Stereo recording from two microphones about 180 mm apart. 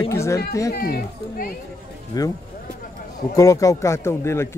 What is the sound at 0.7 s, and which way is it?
Speech, 55° left (ahead or behind).